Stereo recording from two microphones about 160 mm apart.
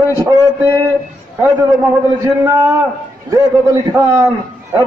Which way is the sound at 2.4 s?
15° right (ahead or behind).